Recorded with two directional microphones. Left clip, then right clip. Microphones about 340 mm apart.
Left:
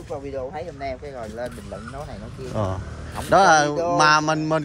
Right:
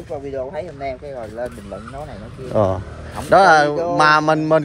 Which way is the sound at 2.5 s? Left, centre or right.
Centre.